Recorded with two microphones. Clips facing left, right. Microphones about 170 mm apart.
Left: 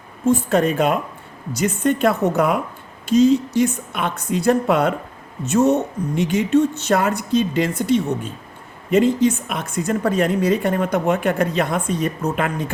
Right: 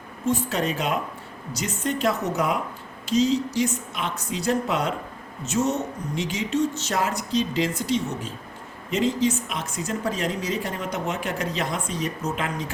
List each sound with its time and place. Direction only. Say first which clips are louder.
0.3 s a woman's voice: left 7 dB; 50° left (ahead or behind)